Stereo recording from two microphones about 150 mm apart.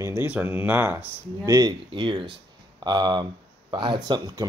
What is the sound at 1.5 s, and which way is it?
Speech, 25° right (ahead or behind).